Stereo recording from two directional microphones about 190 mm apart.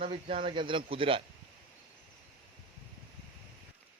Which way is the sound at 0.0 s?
30° right (ahead or behind).